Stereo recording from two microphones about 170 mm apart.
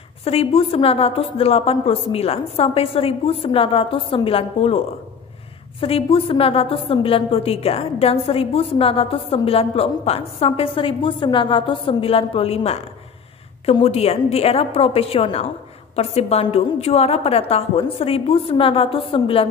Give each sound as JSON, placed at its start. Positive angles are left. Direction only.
{"t": 0.2, "sound": "a woman's voice", "side_deg": 35}
{"t": 5.8, "sound": "a woman's voice", "side_deg": 35}